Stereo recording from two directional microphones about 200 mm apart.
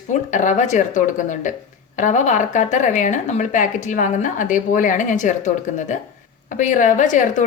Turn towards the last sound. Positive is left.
turn(degrees=40)  # may be behind; listen again after turning